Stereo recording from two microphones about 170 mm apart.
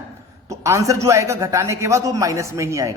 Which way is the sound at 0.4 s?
20° right (ahead or behind).